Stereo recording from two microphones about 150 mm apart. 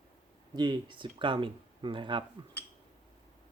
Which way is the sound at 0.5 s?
30° right (ahead or behind).